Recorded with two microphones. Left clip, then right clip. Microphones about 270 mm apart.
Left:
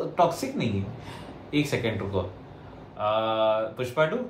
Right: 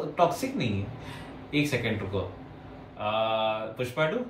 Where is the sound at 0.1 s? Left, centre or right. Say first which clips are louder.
Left 1 dB; centre.